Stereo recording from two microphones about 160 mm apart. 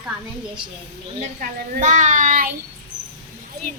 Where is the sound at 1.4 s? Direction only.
55° right (ahead or behind).